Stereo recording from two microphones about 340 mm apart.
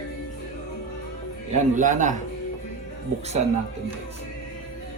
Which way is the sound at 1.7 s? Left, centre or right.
Right.